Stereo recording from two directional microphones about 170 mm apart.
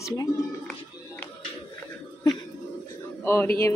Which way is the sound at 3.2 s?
15° left (ahead or behind).